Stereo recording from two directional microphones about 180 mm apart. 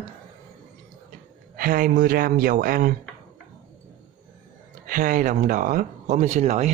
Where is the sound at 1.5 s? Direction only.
55° right (ahead or behind).